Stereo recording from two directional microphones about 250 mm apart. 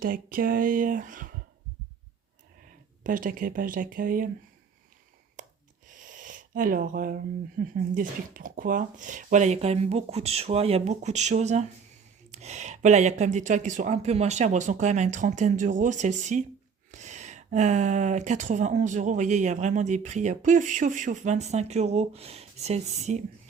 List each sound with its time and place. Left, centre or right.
0.0 s speech: right
3.0 s speech: right
5.4 s a sound: right
7.6 s speech: right